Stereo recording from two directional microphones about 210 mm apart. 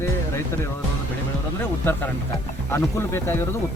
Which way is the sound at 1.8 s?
10° left (ahead or behind).